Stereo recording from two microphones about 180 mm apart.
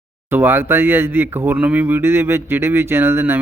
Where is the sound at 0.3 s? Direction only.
10° right (ahead or behind).